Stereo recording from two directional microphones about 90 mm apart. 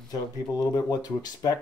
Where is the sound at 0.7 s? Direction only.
50° left (ahead or behind).